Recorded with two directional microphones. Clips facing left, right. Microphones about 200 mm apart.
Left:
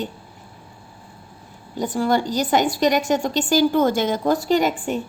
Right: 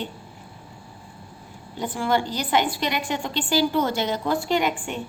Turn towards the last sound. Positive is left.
turn(degrees=40)  # may be behind; listen again after turning